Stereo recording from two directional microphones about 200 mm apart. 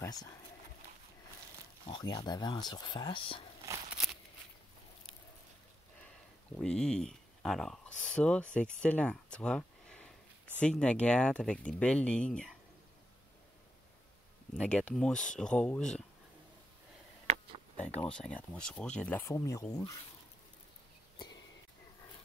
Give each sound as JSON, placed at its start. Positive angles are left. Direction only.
{"t": 0.0, "sound": "speech", "side_deg": 20}
{"t": 1.9, "sound": "speech", "side_deg": 20}
{"t": 6.5, "sound": "speech", "side_deg": 5}
{"t": 14.6, "sound": "speech", "side_deg": 5}
{"t": 18.0, "sound": "speech", "side_deg": 5}